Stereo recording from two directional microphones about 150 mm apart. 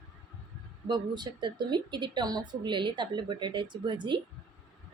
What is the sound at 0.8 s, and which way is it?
Speech, 30° right (ahead or behind).